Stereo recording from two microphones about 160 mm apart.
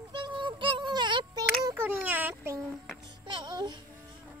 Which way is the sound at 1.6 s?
15° right (ahead or behind).